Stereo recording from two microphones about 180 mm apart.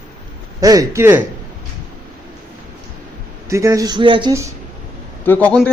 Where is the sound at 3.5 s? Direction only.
20° right (ahead or behind).